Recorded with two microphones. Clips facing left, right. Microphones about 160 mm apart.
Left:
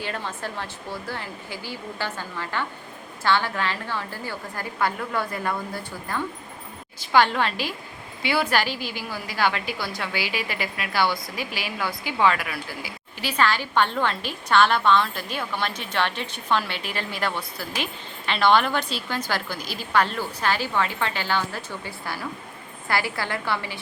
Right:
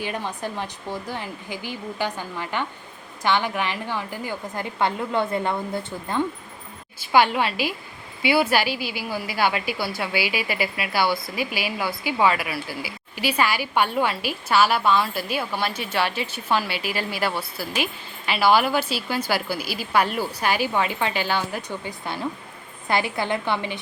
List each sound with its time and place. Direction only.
0.0 s a woman's voice: 15° right (ahead or behind)
7.0 s a woman's voice: 10° right (ahead or behind)